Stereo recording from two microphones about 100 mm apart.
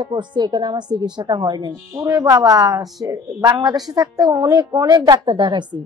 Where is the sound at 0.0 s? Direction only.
50° right (ahead or behind).